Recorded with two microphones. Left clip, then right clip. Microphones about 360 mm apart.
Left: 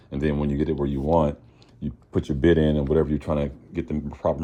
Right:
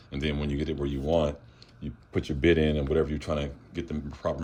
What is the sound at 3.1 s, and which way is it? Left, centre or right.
Speech, centre.